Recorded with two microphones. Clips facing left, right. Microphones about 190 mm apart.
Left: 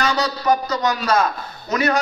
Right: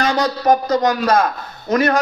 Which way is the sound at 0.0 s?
50° right (ahead or behind).